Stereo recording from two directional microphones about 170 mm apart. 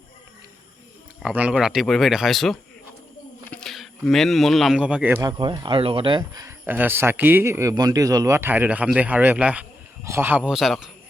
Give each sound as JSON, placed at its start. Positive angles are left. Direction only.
{"t": 1.2, "sound": "speech", "side_deg": -5}
{"t": 5.2, "sound": "speech", "side_deg": -25}